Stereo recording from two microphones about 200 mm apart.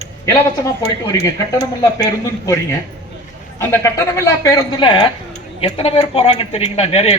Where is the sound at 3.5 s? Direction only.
15° left (ahead or behind).